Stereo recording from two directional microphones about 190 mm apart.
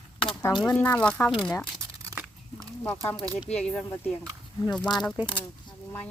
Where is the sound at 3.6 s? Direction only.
5° left (ahead or behind).